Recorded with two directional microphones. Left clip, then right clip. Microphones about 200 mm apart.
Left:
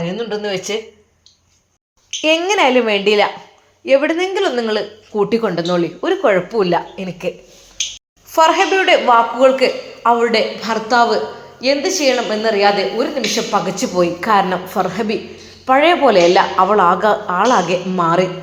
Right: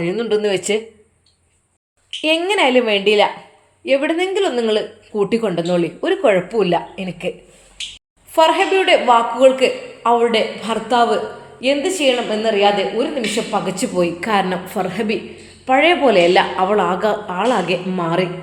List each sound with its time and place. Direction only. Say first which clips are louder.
0.1 s speech: right 3 dB; 20° right (ahead or behind)
2.2 s a woman's voice: left 2 dB; 5° left (ahead or behind)
8.4 s a woman's voice: left 1 dB; 5° left (ahead or behind)